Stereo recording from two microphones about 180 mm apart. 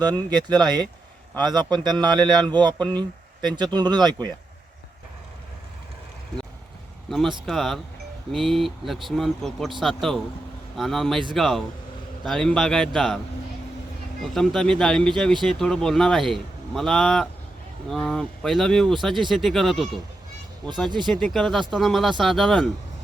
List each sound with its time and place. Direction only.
0.0 s a man's voice: 25° right (ahead or behind)
7.1 s speech: centre (ahead or behind)
14.2 s speech: centre (ahead or behind)
21.0 s speech: 5° left (ahead or behind)